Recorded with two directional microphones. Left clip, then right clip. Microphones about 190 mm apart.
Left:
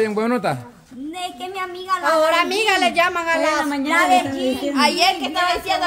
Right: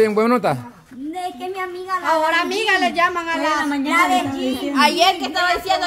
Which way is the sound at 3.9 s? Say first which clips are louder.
Left 1 dB; 10° right (ahead or behind).